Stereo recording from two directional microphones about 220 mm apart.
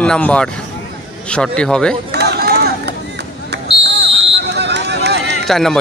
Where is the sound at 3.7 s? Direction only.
25° left (ahead or behind).